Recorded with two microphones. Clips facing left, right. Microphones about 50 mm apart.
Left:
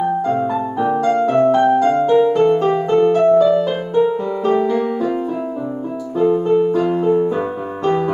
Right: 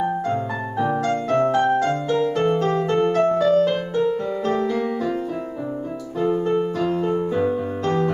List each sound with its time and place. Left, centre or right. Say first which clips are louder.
0.7 s music: left 5 dB; centre